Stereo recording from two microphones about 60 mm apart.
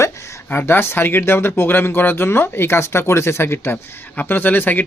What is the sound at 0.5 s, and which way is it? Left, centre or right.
Speech, left.